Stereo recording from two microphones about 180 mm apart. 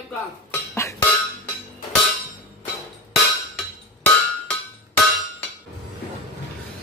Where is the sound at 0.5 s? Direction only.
15° left (ahead or behind).